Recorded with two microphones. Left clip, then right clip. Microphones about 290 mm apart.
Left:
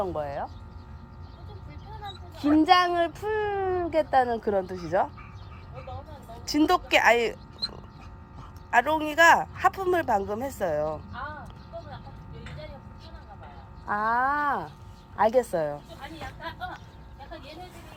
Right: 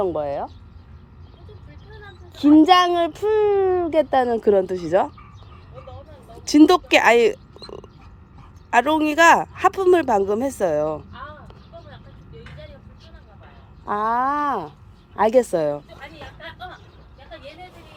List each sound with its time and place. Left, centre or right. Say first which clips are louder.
0.0 s a child's voice: right 7 dB; right
2.6 s a child's voice: right 5 dB; right
6.4 s a child's voice: right 9 dB; right
13.8 s a child's voice: right 4 dB; right